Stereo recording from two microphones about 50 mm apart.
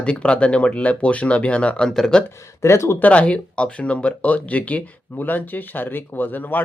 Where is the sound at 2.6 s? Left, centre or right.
Left.